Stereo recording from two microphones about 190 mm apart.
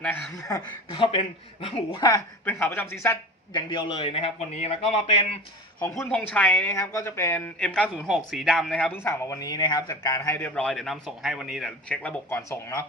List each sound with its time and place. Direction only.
0.0 s speech: 5° left (ahead or behind)
0.4 s a man's voice: 20° left (ahead or behind)
2.0 s speech: 15° left (ahead or behind)
3.7 s a man's voice: 25° left (ahead or behind)
6.0 s speech: 10° left (ahead or behind)